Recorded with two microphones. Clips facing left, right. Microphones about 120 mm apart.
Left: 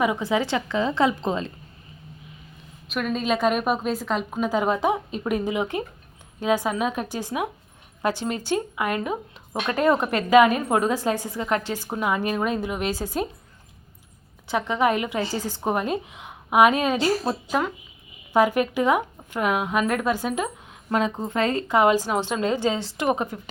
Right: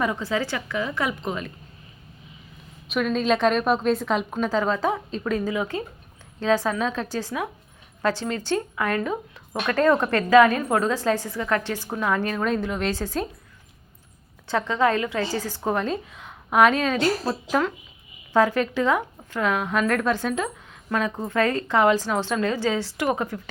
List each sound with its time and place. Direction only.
0.0 s a woman's voice: 15° left (ahead or behind)
2.9 s a woman's voice: 5° left (ahead or behind)
4.4 s a woman's voice: 15° left (ahead or behind)
14.4 s a woman's voice: 15° left (ahead or behind)